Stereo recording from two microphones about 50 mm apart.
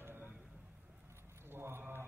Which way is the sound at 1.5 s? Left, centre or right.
Right.